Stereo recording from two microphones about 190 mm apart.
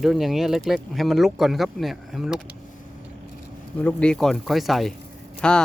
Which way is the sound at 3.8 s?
5° left (ahead or behind).